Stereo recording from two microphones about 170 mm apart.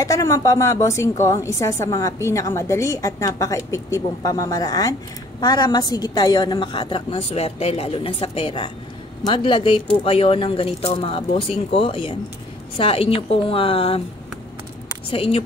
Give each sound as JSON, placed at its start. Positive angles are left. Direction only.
{"t": 0.0, "sound": "a woman's voice", "side_deg": 20}
{"t": 15.0, "sound": "a woman's voice", "side_deg": 35}